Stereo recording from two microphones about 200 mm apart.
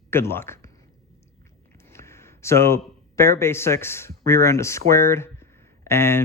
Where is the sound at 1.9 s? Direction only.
15° left (ahead or behind).